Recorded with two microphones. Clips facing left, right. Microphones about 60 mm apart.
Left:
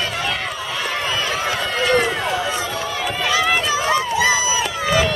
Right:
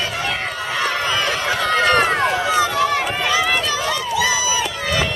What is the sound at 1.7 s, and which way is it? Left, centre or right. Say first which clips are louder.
Run: right 3 dB; right.